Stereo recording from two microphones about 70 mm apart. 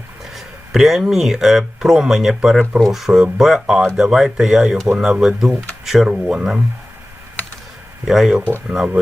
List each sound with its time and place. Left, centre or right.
0.3 s speech: centre
8.0 s speech: centre